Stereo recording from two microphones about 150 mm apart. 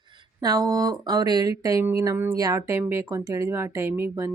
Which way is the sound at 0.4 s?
25° right (ahead or behind).